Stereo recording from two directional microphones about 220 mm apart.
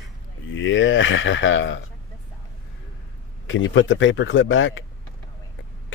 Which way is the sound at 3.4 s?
60° left (ahead or behind).